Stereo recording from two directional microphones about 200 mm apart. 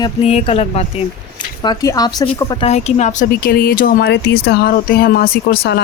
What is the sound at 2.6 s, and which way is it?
Speech, 35° left (ahead or behind).